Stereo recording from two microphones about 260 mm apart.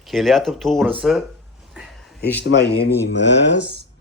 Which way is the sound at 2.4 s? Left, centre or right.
Left.